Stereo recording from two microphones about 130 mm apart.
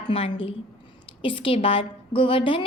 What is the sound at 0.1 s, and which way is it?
A woman's voice, 45° left (ahead or behind).